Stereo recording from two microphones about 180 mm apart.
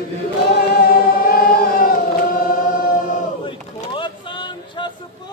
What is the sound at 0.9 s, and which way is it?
Singing, 55° left (ahead or behind).